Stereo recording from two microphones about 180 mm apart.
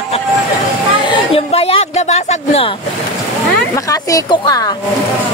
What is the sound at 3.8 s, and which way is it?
Speech, 20° left (ahead or behind).